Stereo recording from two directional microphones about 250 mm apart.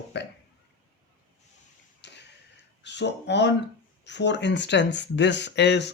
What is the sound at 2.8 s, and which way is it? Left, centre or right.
Speech, left.